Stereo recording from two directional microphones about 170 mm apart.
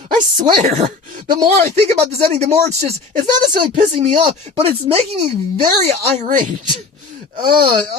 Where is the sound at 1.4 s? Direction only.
40° right (ahead or behind).